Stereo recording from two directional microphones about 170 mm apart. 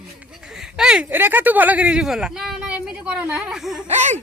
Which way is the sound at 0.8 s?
5° right (ahead or behind).